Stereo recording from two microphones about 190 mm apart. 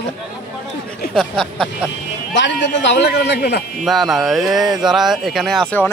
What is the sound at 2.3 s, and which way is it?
A man's voice, 70° left (ahead or behind).